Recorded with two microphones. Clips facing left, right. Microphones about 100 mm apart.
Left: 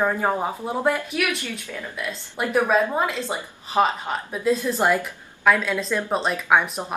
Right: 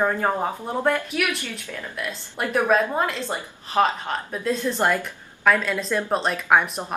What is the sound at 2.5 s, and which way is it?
A woman's voice, 5° left (ahead or behind).